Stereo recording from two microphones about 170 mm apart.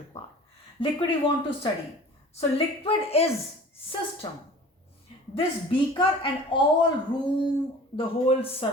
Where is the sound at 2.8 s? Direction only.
35° left (ahead or behind).